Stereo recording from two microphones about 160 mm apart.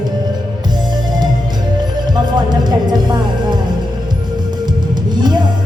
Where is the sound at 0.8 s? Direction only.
25° right (ahead or behind).